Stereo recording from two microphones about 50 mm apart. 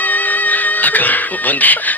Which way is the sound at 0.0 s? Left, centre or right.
Left.